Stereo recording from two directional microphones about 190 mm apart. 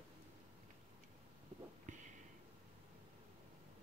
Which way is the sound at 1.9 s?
40° right (ahead or behind).